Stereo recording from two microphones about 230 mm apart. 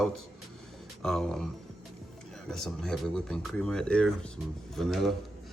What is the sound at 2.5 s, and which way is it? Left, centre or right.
Bell, centre.